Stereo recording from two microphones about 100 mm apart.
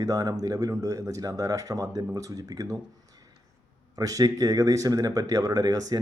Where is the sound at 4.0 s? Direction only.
35° right (ahead or behind).